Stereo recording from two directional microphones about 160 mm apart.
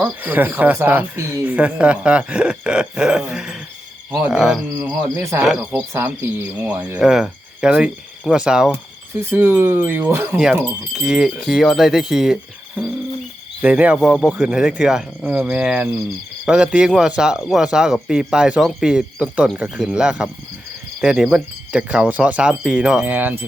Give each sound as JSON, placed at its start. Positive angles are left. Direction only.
{"t": 0.0, "sound": "speech", "side_deg": -10}
{"t": 4.8, "sound": "speech", "side_deg": -15}
{"t": 5.4, "sound": "speech", "side_deg": -5}